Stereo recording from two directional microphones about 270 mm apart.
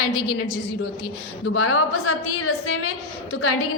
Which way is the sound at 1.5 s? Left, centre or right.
Left.